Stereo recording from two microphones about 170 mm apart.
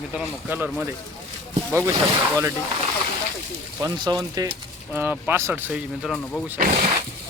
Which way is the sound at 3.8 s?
25° right (ahead or behind).